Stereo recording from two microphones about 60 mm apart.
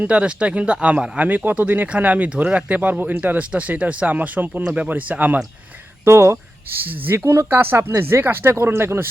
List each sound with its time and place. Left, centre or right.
0.0 s speech: centre
1.5 s speech: right
6.1 s speech: right